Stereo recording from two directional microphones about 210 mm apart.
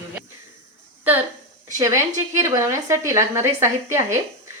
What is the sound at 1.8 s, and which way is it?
A woman's voice, 15° right (ahead or behind).